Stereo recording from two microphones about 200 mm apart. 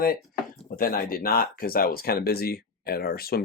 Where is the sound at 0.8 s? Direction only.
45° left (ahead or behind).